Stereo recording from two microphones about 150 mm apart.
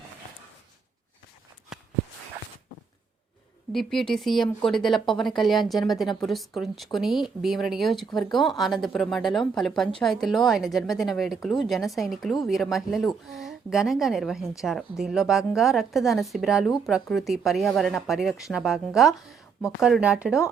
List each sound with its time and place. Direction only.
3.7 s a woman's voice: centre (ahead or behind)